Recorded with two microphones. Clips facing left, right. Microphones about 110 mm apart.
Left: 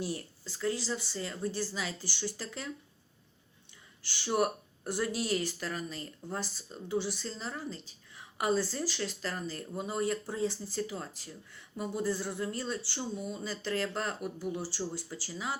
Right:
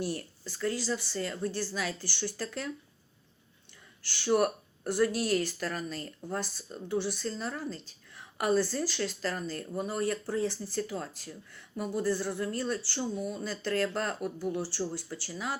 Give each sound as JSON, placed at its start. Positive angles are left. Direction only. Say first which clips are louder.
{"t": 0.0, "sound": "speech", "louder": "right 2 dB", "side_deg": 20}
{"t": 4.1, "sound": "speech", "louder": "right 3 dB", "side_deg": 20}